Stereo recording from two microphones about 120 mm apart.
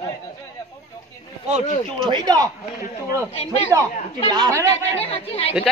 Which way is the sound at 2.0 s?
35° right (ahead or behind).